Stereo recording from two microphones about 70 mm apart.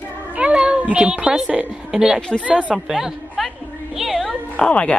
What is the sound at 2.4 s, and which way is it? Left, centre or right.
A woman's voice, centre.